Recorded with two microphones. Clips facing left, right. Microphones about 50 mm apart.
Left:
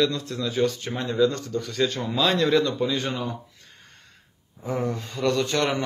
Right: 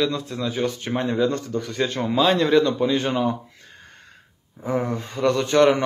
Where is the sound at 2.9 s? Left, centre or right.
Right.